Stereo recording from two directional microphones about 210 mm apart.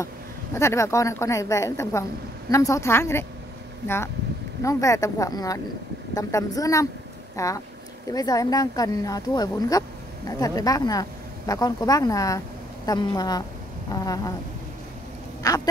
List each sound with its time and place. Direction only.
0.6 s speech: 15° left (ahead or behind)
15.4 s rodents: 15° left (ahead or behind)